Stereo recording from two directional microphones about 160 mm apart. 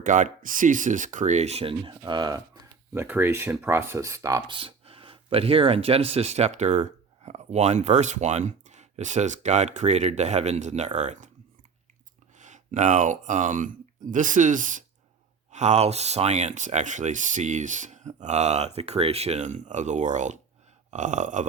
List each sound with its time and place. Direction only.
0.0 s speech: 50° right (ahead or behind)
1.8 s speech: 25° right (ahead or behind)
4.5 s speech: 35° right (ahead or behind)
12.4 s speech: 50° right (ahead or behind)